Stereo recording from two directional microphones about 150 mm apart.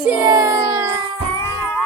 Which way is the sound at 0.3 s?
25° right (ahead or behind).